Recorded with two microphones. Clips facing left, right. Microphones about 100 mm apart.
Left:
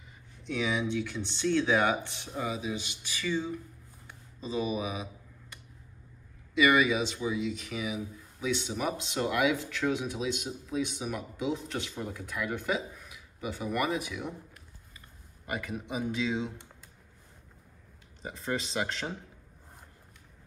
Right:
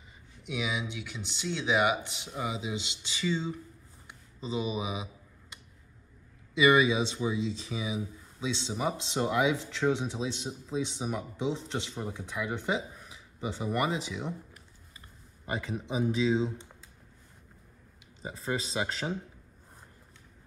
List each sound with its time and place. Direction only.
0.4 s speech: 10° right (ahead or behind)
4.1 s a sound: 20° right (ahead or behind)
6.5 s speech: 20° right (ahead or behind)
15.4 s speech: 25° right (ahead or behind)
18.2 s speech: 5° right (ahead or behind)